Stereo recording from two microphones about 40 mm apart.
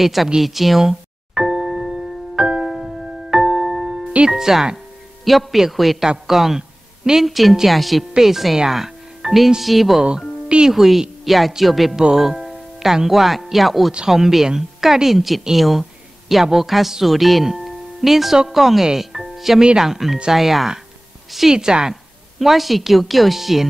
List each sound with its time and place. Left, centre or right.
0.0 s a woman's voice: centre
0.4 s music: centre
4.3 s a woman's voice: centre
8.5 s music: centre
9.6 s a woman's voice: centre
11.9 s a woman's voice: centre
17.6 s music: centre
18.5 s a woman's voice: centre
19.6 s speech: right
19.9 s a woman's voice: centre
21.5 s a woman's voice: centre
22.4 s a woman's voice: centre